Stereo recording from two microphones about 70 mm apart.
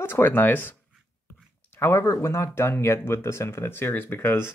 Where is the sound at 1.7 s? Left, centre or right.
Left.